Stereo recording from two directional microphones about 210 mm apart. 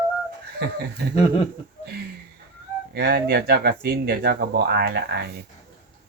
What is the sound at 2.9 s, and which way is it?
Speech, 50° right (ahead or behind).